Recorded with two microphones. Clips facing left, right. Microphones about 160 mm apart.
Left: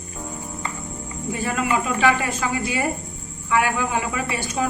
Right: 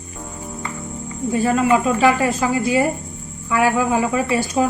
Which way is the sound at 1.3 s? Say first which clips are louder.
Right 7 dB; 30° right (ahead or behind).